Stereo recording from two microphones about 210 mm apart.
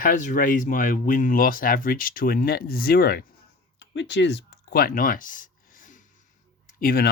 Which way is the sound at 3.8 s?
60° left (ahead or behind).